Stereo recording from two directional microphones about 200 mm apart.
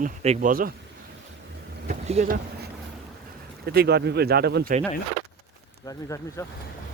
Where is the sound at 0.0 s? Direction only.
40° right (ahead or behind).